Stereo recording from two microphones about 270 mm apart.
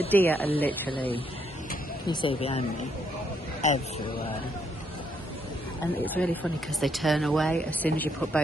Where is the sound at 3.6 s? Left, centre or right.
Left.